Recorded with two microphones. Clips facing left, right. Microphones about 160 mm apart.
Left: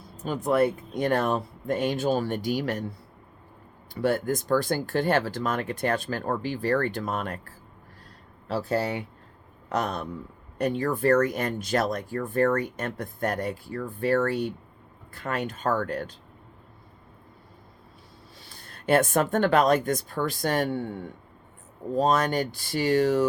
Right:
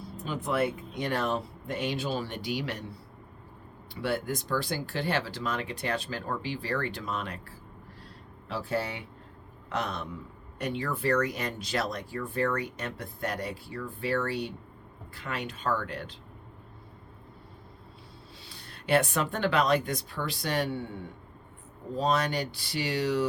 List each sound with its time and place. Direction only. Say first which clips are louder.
0.3 s speech: left 6 dB; 40° left (ahead or behind)
3.9 s a man's voice: left 6 dB; 45° left (ahead or behind)
18.4 s speech: left 5 dB; 45° left (ahead or behind)
21.9 s speech: left 5 dB; 45° left (ahead or behind)